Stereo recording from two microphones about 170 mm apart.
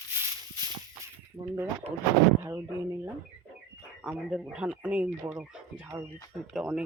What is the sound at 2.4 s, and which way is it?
Speech, 15° right (ahead or behind).